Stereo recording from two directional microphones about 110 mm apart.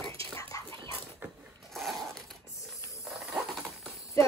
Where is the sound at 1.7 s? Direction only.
Centre (ahead or behind).